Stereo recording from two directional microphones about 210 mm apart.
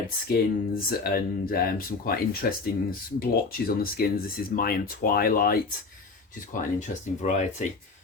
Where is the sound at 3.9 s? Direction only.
45° left (ahead or behind).